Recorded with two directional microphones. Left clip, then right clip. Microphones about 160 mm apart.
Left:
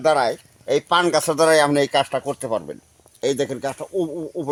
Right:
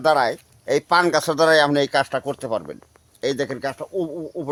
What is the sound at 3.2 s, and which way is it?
Speech, 40° left (ahead or behind).